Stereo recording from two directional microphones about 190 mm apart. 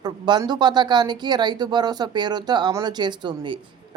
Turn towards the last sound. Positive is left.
turn(degrees=-25)  # may be behind; listen again after turning